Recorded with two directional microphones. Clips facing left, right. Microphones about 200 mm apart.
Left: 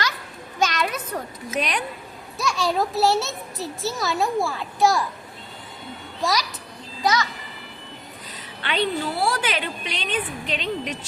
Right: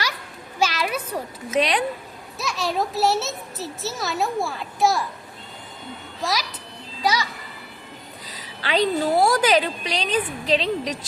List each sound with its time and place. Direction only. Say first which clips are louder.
0.6 s a sound: even; 10° right (ahead or behind)
1.5 s a woman's voice: right 5 dB; 30° right (ahead or behind)
2.4 s a child's voice: left 2 dB; centre (ahead or behind)
7.0 s music: left 1 dB; 10° right (ahead or behind)
8.3 s a woman's voice: right 5 dB; 35° right (ahead or behind)